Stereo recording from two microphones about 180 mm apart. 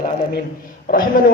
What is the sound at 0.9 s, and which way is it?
Speech, 55° left (ahead or behind).